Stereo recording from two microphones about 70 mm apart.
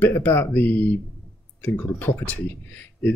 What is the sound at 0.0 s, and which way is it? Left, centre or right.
Speech, left.